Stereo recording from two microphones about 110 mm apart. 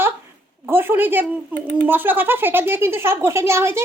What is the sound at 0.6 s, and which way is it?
Speech, 20° right (ahead or behind).